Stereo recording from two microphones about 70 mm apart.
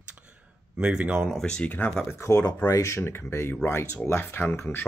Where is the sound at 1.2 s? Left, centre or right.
Centre.